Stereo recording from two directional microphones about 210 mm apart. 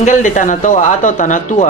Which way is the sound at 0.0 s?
35° left (ahead or behind).